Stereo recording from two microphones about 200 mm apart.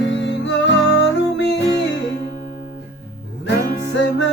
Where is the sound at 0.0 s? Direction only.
65° left (ahead or behind).